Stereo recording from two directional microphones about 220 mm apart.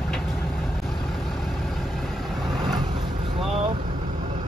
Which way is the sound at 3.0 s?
25° right (ahead or behind).